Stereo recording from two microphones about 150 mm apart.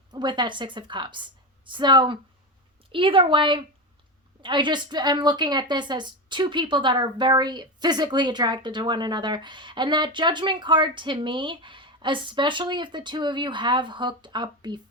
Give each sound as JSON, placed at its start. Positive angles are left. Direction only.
{"t": 0.1, "sound": "a woman's voice", "side_deg": -30}